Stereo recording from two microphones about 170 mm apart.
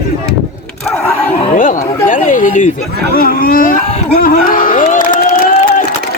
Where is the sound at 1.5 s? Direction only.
50° left (ahead or behind).